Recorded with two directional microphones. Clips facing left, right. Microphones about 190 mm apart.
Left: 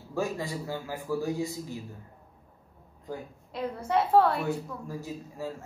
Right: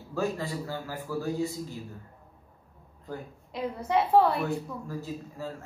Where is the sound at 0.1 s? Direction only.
15° left (ahead or behind).